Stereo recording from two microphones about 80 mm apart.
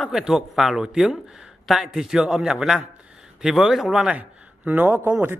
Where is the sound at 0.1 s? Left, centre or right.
Centre.